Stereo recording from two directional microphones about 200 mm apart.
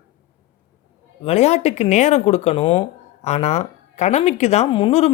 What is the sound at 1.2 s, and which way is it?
Speech, 30° left (ahead or behind).